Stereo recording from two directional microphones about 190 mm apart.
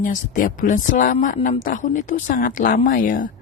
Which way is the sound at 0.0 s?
45° left (ahead or behind).